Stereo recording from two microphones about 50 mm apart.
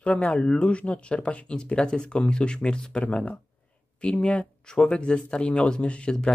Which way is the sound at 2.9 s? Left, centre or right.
Left.